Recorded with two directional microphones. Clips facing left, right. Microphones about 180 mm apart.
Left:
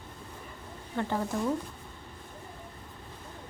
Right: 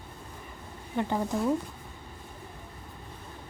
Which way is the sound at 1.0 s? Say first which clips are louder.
Right 2 dB; 15° right (ahead or behind).